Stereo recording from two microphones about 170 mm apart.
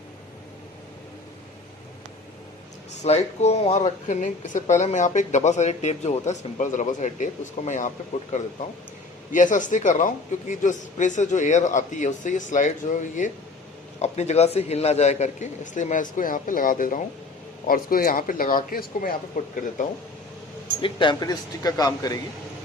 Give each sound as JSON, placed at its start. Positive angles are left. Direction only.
{"t": 3.0, "sound": "speech", "side_deg": 40}
{"t": 9.3, "sound": "speech", "side_deg": 50}
{"t": 20.8, "sound": "speech", "side_deg": 30}